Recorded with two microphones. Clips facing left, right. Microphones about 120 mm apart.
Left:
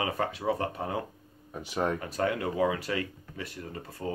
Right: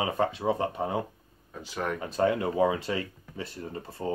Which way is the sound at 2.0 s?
25° right (ahead or behind).